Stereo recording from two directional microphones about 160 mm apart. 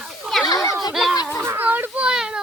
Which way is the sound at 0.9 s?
Centre (ahead or behind).